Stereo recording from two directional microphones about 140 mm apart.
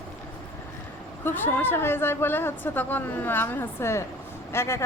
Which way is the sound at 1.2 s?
15° left (ahead or behind).